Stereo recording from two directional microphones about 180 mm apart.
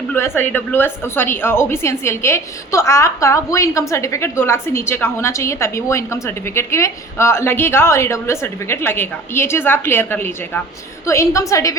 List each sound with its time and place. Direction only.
0.1 s a woman's voice: 10° left (ahead or behind)